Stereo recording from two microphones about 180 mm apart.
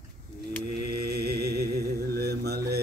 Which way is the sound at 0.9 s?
60° right (ahead or behind).